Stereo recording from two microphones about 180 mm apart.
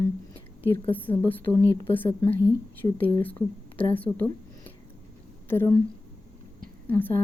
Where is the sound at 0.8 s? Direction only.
10° left (ahead or behind).